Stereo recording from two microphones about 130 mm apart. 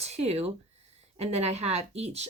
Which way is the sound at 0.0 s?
55° right (ahead or behind).